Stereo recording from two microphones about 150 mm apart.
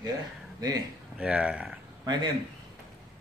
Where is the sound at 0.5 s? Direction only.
25° right (ahead or behind).